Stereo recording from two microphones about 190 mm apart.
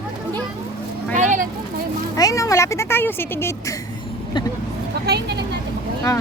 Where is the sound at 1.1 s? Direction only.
40° right (ahead or behind).